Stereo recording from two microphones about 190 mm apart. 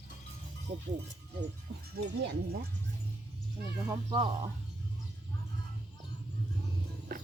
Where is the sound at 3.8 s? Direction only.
25° right (ahead or behind).